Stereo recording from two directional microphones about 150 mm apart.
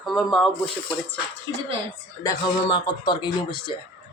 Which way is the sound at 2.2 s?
25° left (ahead or behind).